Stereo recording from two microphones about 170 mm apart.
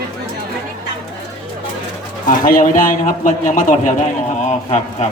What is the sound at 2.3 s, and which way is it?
A man's voice, 55° left (ahead or behind).